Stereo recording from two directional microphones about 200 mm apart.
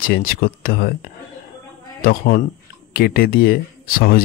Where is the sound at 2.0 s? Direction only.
50° left (ahead or behind).